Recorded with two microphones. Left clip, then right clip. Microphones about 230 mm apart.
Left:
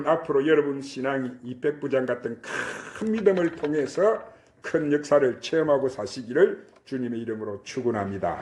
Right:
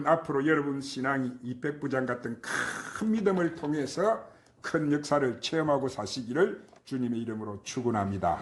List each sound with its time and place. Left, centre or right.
0.0 s speech: right
1.8 s speech: right
2.5 s speech: right